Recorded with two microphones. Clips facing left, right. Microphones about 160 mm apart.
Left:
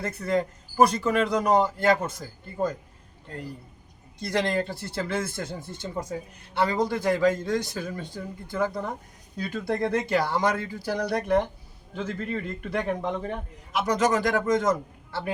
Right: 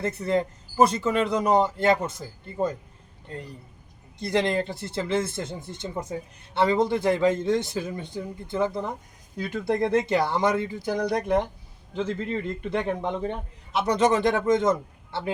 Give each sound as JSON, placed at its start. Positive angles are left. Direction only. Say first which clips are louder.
{"t": 0.0, "sound": "speech", "louder": "right 1 dB", "side_deg": -25}
{"t": 4.2, "sound": "speech", "louder": "right 2 dB", "side_deg": -20}